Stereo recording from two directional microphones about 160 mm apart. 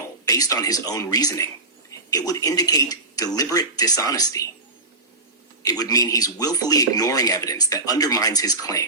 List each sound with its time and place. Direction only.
0.3 s speech: 20° left (ahead or behind)
5.6 s speech: 25° left (ahead or behind)